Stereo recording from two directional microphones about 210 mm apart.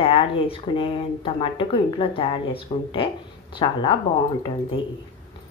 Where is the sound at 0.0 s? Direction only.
25° left (ahead or behind).